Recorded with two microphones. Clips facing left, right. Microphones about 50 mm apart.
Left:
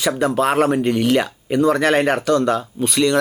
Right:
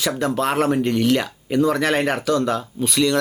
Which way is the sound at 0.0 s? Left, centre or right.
Centre.